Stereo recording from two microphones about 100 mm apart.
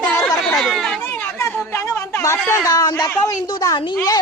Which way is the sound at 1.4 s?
25° left (ahead or behind).